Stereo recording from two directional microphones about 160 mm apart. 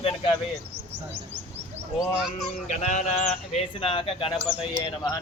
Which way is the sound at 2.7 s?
45° left (ahead or behind).